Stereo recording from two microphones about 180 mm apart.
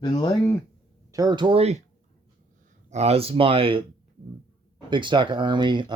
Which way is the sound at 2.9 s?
35° right (ahead or behind).